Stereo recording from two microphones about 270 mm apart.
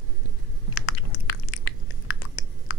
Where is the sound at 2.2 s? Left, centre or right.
Left.